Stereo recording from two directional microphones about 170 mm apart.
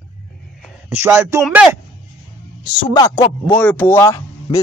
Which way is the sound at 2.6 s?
25° left (ahead or behind).